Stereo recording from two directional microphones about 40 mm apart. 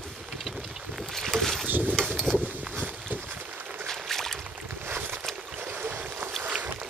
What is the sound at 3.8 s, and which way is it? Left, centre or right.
Boat, centre.